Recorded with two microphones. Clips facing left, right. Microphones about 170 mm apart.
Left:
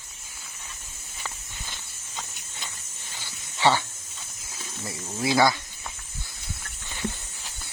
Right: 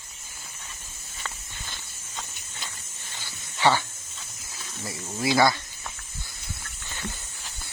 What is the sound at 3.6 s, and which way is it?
Speech, 20° left (ahead or behind).